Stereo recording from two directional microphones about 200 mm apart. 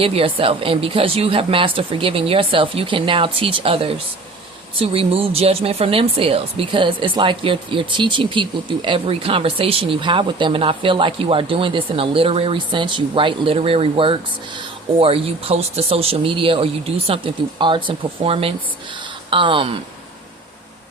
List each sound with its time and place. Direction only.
0.0 s speech: 30° right (ahead or behind)